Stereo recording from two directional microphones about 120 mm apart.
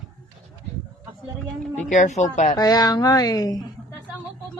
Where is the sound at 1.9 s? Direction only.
85° left.